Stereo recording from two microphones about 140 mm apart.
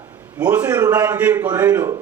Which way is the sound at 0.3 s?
10° right (ahead or behind).